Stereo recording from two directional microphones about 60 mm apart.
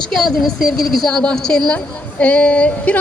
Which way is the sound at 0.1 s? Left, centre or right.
Centre.